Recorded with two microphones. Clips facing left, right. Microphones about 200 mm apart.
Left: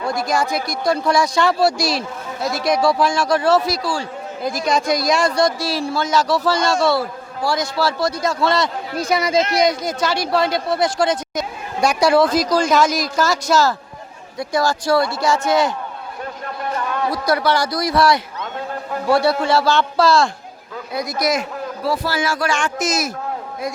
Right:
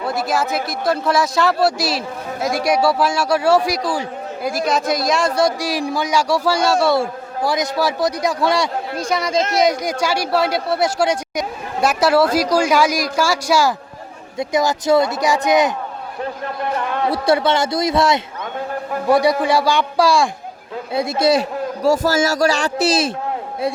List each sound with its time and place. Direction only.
0.0 s speech: 5° right (ahead or behind)
6.9 s speech: 20° right (ahead or behind)
9.0 s speech: 5° left (ahead or behind)
9.6 s a man's voice: 10° right (ahead or behind)
16.9 s a man's voice: 25° right (ahead or behind)
20.9 s a man's voice: 25° right (ahead or behind)
21.8 s a man's voice: 45° right (ahead or behind)